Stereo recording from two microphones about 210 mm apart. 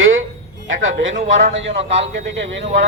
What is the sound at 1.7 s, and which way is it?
Speech, 30° right (ahead or behind).